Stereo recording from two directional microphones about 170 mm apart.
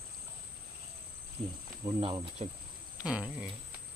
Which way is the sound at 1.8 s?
30° right (ahead or behind).